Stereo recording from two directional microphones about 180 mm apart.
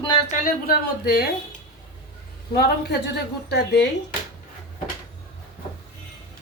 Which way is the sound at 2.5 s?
65° left (ahead or behind).